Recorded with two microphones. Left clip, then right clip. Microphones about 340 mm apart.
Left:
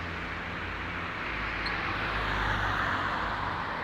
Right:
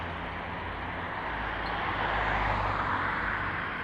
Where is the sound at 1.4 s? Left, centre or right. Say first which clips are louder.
Left 1 dB; centre.